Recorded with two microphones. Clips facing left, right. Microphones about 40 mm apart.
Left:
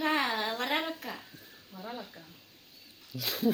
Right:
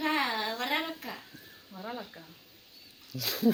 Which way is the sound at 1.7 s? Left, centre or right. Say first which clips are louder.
Right 2 dB; centre.